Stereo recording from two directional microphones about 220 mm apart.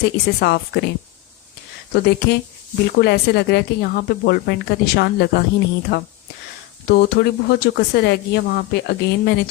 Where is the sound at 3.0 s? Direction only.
45° left (ahead or behind).